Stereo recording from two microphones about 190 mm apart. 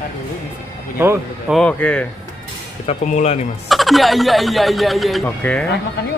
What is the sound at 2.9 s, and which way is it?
Speech, 35° left (ahead or behind).